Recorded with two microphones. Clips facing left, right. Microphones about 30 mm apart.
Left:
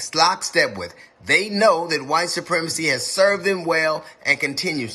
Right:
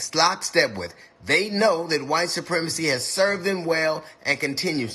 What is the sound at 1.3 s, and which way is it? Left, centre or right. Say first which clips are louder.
Speech: left 3 dB; left.